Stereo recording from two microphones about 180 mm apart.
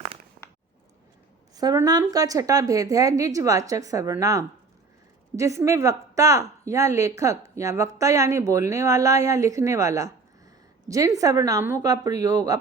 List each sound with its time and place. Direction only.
1.5 s a woman's voice: 20° right (ahead or behind)